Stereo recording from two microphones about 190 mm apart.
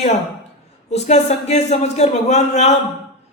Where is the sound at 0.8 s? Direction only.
35° left (ahead or behind).